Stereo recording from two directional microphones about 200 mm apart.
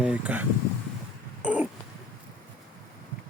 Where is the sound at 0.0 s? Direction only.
5° right (ahead or behind).